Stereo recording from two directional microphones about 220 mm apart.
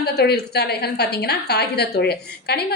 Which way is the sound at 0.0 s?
45° left (ahead or behind).